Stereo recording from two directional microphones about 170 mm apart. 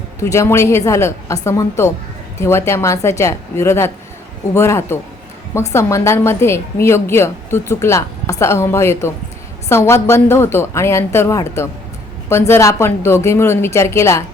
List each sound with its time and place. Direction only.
0.2 s a woman's voice: 15° left (ahead or behind)